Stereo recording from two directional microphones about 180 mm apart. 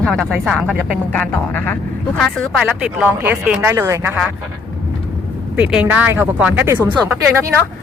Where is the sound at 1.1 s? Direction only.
10° left (ahead or behind); by 4.3 s 15° right (ahead or behind).